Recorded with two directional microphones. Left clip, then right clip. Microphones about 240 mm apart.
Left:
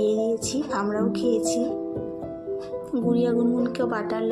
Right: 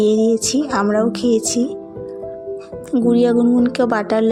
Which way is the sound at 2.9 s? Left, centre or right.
Right.